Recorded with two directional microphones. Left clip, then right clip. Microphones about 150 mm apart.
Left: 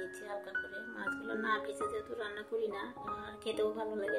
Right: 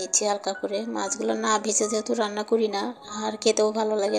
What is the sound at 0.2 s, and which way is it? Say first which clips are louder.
Speech: right 14 dB; 50° right (ahead or behind).